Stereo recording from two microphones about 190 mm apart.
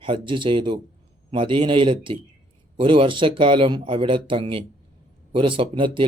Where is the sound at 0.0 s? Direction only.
25° right (ahead or behind).